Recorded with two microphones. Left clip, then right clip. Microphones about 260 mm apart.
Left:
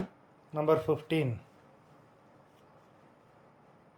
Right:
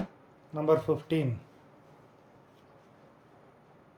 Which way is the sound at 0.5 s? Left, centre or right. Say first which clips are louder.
Right 1 dB; centre.